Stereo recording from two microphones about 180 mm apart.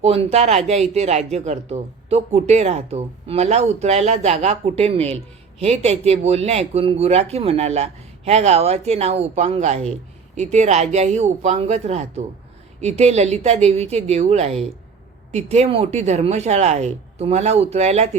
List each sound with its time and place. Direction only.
0.0 s speech: 35° right (ahead or behind)